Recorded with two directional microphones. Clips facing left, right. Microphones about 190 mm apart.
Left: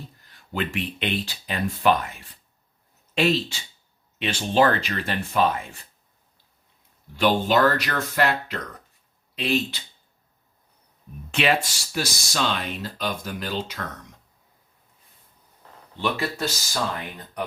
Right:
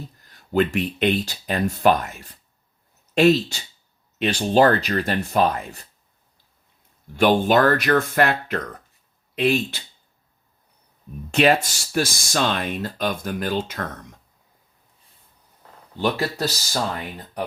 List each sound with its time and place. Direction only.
0.3 s speech: 40° right (ahead or behind)
7.2 s speech: 50° right (ahead or behind)
11.3 s speech: 40° right (ahead or behind)
16.0 s speech: 35° right (ahead or behind)